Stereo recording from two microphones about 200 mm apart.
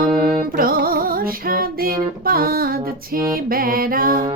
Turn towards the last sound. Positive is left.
turn(degrees=-45)  # may be behind; listen again after turning